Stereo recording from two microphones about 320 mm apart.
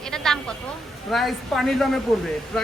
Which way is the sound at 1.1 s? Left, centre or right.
Centre.